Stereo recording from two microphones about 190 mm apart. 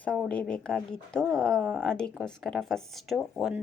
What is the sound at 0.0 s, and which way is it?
Speech, 5° left (ahead or behind).